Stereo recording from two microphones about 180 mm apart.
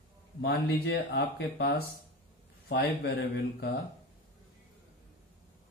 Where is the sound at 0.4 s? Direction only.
70° left (ahead or behind).